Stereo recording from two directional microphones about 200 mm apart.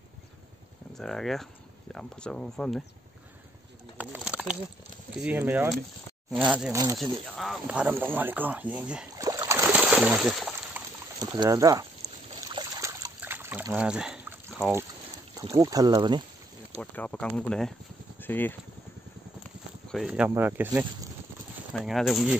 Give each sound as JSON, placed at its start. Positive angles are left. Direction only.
{"t": 0.9, "sound": "speech", "side_deg": 0}
{"t": 4.0, "sound": "bird", "side_deg": -5}
{"t": 5.2, "sound": "speech", "side_deg": -10}
{"t": 6.7, "sound": "speech", "side_deg": -15}
{"t": 7.0, "sound": "speech", "side_deg": 0}
{"t": 9.1, "sound": "a sound", "side_deg": -20}
{"t": 11.1, "sound": "speech", "side_deg": -20}
{"t": 12.4, "sound": "trickle", "side_deg": -20}
{"t": 15.3, "sound": "speech", "side_deg": -15}
{"t": 16.9, "sound": "speech", "side_deg": 5}
{"t": 19.9, "sound": "speech", "side_deg": 0}
{"t": 21.7, "sound": "speech", "side_deg": 0}